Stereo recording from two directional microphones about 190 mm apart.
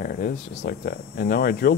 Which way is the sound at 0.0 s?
50° left (ahead or behind).